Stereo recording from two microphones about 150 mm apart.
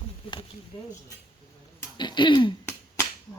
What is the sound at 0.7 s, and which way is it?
Speech, 35° left (ahead or behind).